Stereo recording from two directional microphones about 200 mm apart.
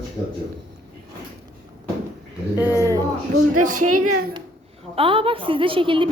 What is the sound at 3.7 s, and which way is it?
Speech, 90° right.